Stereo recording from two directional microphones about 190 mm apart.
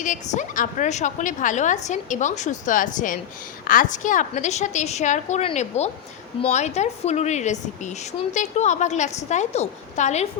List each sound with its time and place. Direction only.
0.0 s a woman's voice: 40° left (ahead or behind)